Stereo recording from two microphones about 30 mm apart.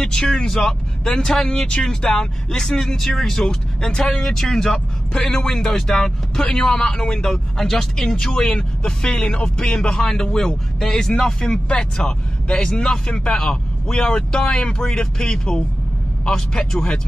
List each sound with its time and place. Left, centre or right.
0.0 s speech: left
0.5 s speech: centre
2.9 s speech: centre
4.2 s speech: centre
4.6 s speech: left
6.4 s a man's voice: left
6.7 s speech: left
7.5 s speech: centre
8.5 s speech: left
13.0 s a man's voice: left
13.3 s speech: left